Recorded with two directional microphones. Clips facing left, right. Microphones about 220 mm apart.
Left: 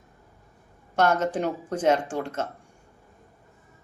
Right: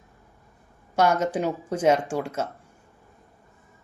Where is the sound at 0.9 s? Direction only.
10° right (ahead or behind).